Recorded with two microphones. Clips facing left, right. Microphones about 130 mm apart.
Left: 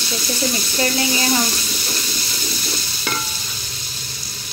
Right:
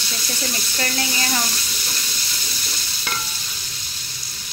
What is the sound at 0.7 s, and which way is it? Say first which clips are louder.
Frying: left 5 dB; 15° left (ahead or behind).